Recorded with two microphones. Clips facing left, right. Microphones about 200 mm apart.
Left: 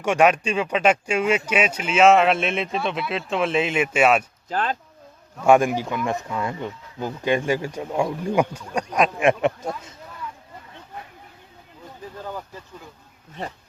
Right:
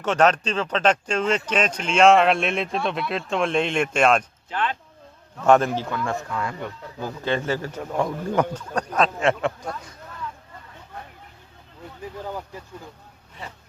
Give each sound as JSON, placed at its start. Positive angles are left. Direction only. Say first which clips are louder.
{"t": 0.0, "sound": "speech", "louder": "left 1 dB", "side_deg": 10}
{"t": 4.4, "sound": "speech", "louder": "left 2 dB", "side_deg": 40}
{"t": 5.4, "sound": "speech", "louder": "left 1 dB", "side_deg": 10}